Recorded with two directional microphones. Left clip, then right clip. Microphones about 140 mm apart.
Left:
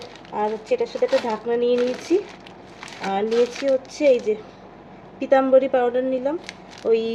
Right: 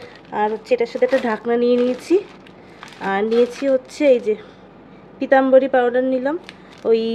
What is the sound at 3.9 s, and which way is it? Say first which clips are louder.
Speech: right 3 dB; 25° right (ahead or behind).